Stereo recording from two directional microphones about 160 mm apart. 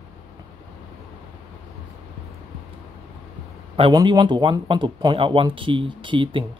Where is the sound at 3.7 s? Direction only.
35° right (ahead or behind).